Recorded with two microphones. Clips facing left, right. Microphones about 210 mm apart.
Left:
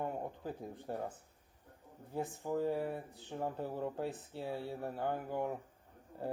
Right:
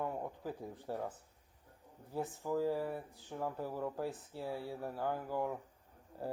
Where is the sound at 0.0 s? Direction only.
20° left (ahead or behind).